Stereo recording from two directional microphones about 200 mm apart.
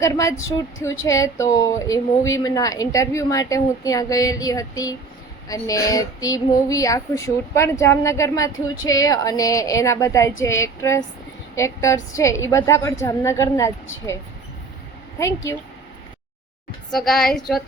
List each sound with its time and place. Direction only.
0.0 s speech: 15° left (ahead or behind)
15.2 s speech: 15° left (ahead or behind)
16.9 s a woman's voice: centre (ahead or behind)